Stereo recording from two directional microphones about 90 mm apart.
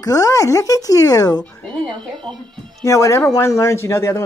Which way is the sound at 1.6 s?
10° left (ahead or behind).